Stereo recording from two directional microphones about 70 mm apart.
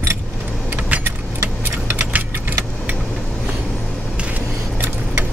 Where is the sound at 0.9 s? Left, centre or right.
Right.